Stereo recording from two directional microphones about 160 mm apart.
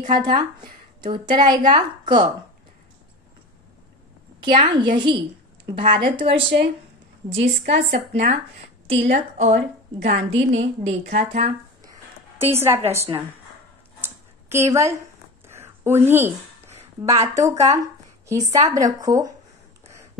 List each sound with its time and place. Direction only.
0.1 s a woman's voice: 30° right (ahead or behind)
4.4 s a woman's voice: 30° right (ahead or behind)
11.8 s a sound: 20° right (ahead or behind)
12.5 s a woman's voice: 15° right (ahead or behind)
14.0 s a sound: 15° right (ahead or behind)
17.1 s a woman's voice: 20° right (ahead or behind)